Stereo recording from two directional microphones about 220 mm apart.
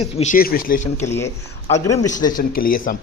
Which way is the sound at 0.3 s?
40° left (ahead or behind).